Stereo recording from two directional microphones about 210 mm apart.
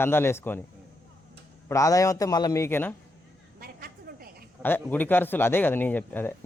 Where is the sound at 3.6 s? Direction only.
45° right (ahead or behind).